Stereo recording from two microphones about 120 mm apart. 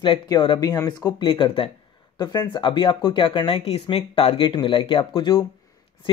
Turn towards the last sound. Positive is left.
turn(degrees=40)  # may be behind; listen again after turning